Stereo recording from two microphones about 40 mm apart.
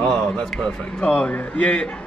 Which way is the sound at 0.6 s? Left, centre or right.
Left.